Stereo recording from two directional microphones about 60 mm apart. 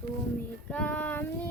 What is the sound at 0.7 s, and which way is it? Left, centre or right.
Child singing, left.